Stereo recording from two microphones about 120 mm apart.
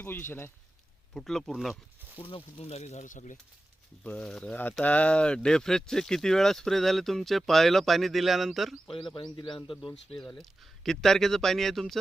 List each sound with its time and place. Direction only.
0.0 s speech: 20° left (ahead or behind)
1.1 s speech: 5° left (ahead or behind)
2.2 s speech: 55° left (ahead or behind); by 3.3 s 90° left
4.0 s speech: 10° left (ahead or behind)
9.1 s speech: 40° left (ahead or behind)
10.2 s speech: 5° left (ahead or behind)